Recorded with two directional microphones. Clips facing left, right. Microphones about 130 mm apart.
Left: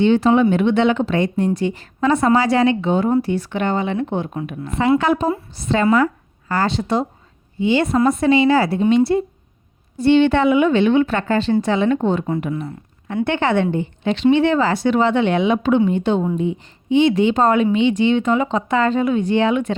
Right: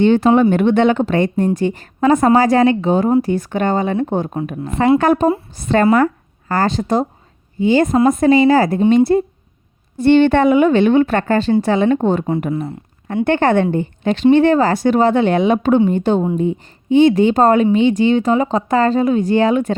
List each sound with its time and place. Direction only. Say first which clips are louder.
0.0 s a woman's voice: right 2 dB; 50° right (ahead or behind)
13.2 s a woman's voice: right 4 dB; 45° right (ahead or behind)